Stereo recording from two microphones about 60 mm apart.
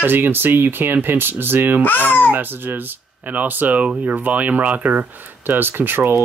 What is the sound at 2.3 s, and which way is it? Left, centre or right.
Speech, right.